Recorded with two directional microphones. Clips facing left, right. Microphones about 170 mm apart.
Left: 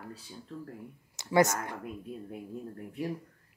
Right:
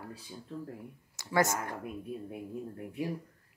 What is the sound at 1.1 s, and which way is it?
Speech, 20° left (ahead or behind).